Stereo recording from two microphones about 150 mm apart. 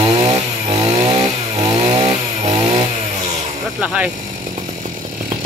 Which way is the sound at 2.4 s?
45° right (ahead or behind).